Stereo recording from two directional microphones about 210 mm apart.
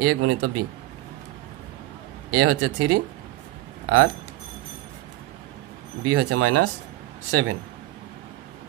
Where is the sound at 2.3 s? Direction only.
90° right.